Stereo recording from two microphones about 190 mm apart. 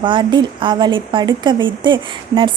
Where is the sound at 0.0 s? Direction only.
25° right (ahead or behind).